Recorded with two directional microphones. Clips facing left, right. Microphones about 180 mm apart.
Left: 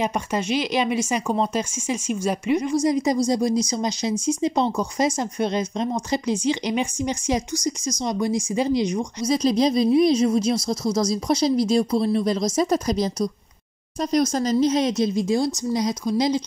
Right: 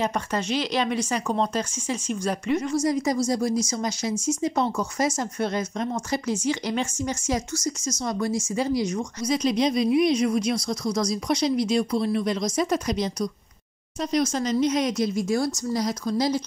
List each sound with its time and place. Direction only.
0.0 s a woman's voice: 10° left (ahead or behind)
9.3 s a woman's voice: 35° left (ahead or behind); by 16.3 s 20° left (ahead or behind)